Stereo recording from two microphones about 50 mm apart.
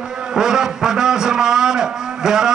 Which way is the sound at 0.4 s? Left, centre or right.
Centre.